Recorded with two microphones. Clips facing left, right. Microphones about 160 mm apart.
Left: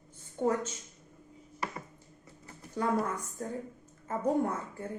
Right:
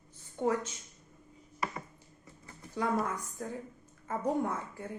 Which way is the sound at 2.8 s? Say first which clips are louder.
Left 1 dB; 35° left (ahead or behind).